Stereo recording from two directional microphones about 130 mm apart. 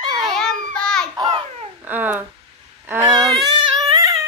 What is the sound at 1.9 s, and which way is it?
Speech, 15° right (ahead or behind).